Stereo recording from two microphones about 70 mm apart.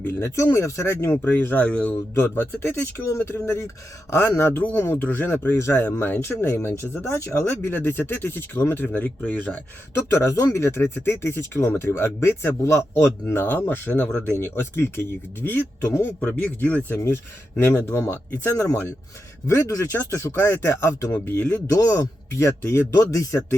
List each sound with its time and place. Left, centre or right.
0.0 s speech: left
4.5 s speech: left
5.5 s speech: left
7.7 s speech: left
10.3 s speech: left
17.6 s speech: left
21.8 s speech: left